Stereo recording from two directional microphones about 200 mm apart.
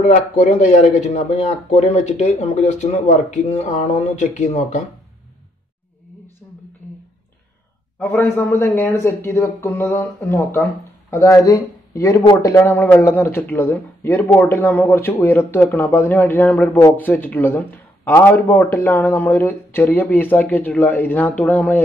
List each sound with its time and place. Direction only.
0.0 s speech: 35° left (ahead or behind)
6.4 s a sound: 10° left (ahead or behind)
8.0 s a man's voice: 10° left (ahead or behind)